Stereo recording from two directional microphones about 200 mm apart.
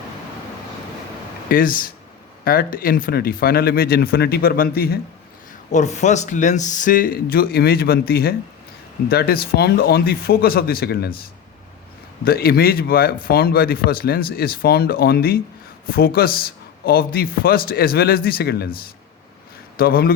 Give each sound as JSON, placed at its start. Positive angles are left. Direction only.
{"t": 1.5, "sound": "a man's voice", "side_deg": 45}
{"t": 5.7, "sound": "a man's voice", "side_deg": 35}
{"t": 12.2, "sound": "a man's voice", "side_deg": 50}
{"t": 19.7, "sound": "a man's voice", "side_deg": 50}